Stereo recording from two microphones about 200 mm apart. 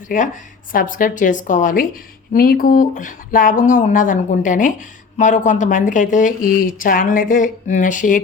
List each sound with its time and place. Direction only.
0.1 s speech: 40° left (ahead or behind)